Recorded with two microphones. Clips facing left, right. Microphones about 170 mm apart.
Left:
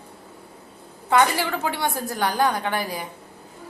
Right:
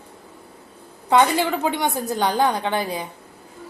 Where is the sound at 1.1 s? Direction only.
20° right (ahead or behind).